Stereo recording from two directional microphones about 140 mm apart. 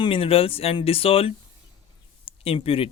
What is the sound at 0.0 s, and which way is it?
Speech, 40° left (ahead or behind).